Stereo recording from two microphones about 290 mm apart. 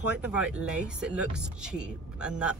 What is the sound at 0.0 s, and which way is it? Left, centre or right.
Speech, centre.